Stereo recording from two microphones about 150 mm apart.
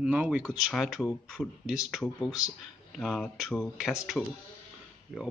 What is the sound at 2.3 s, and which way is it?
Speech, 25° left (ahead or behind).